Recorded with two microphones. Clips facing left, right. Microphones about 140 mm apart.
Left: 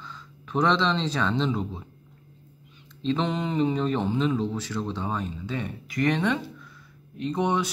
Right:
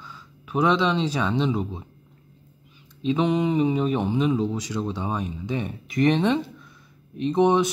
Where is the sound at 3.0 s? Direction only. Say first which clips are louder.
Right 4 dB; 10° right (ahead or behind).